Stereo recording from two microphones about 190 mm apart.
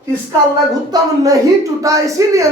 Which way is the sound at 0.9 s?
20° right (ahead or behind).